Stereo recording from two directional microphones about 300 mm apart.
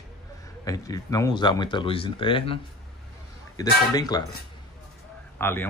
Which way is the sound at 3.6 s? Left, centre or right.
Centre.